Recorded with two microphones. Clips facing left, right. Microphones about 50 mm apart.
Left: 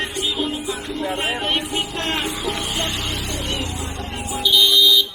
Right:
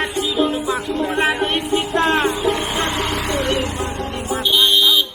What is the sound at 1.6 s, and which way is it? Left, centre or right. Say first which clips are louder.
Music: right 7 dB; right.